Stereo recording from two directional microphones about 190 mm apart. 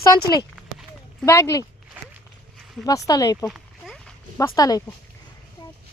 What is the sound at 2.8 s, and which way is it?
Speech, 20° left (ahead or behind).